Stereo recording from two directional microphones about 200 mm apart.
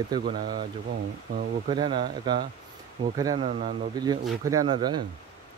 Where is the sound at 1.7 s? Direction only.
20° right (ahead or behind).